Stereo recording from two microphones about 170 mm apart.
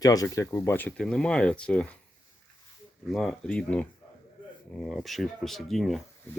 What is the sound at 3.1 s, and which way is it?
Speech, centre (ahead or behind).